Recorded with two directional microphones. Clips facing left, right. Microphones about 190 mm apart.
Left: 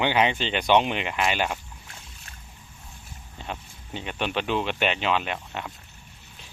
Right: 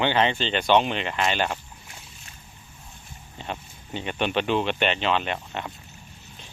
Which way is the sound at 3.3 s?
Centre (ahead or behind).